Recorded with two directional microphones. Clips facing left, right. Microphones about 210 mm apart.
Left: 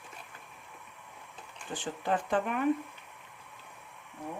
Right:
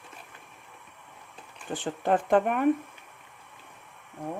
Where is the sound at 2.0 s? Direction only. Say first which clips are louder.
Right 7 dB; 55° right (ahead or behind).